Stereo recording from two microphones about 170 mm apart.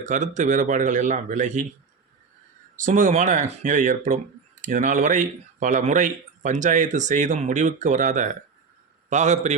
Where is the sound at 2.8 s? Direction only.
50° right (ahead or behind).